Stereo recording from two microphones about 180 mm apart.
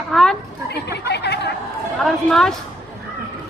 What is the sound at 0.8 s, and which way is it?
Speech, 65° left (ahead or behind).